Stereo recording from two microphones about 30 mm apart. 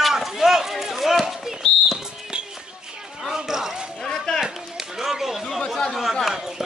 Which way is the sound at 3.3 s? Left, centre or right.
Centre.